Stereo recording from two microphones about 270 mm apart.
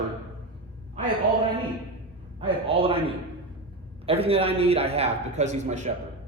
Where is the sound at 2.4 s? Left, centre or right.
Right.